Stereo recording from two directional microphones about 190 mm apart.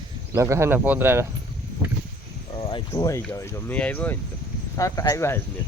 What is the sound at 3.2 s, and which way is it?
Speech, 10° left (ahead or behind).